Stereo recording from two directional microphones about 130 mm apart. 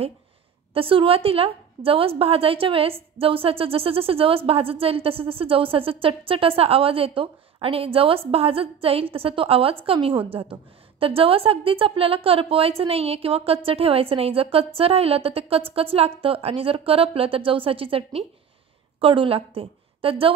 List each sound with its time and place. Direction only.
0.7 s a woman's voice: 45° right (ahead or behind)